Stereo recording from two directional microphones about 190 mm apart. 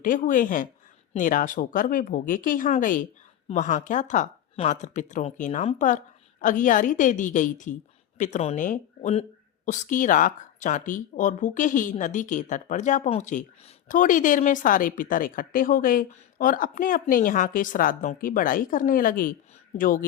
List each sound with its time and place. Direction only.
0.0 s speech: 45° left (ahead or behind)